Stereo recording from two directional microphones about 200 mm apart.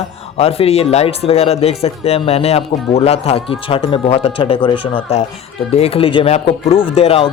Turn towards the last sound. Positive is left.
turn(degrees=30)  # may be behind; listen again after turning